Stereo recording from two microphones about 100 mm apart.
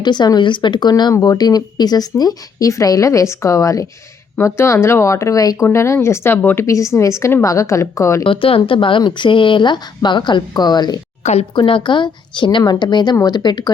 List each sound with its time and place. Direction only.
0.0 s speech: 45° left (ahead or behind); by 6.7 s 20° left (ahead or behind)
6.7 s speech: 30° left (ahead or behind)
8.2 s speech: 60° left (ahead or behind); by 11.0 s 45° left (ahead or behind)
11.5 s speech: 55° left (ahead or behind)